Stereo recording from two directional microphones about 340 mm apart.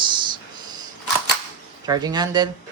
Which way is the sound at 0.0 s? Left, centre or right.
Centre.